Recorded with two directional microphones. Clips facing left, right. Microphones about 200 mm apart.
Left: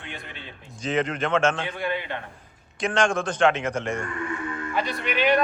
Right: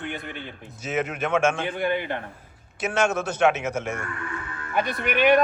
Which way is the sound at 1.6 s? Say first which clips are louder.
Right 3 dB; 50° right (ahead or behind).